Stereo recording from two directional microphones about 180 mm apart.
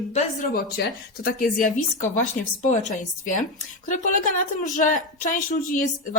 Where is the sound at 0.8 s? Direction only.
55° left (ahead or behind).